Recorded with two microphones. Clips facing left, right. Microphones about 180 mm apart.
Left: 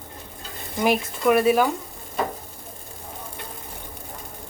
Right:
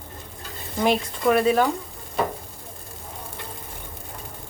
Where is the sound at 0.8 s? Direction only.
5° left (ahead or behind).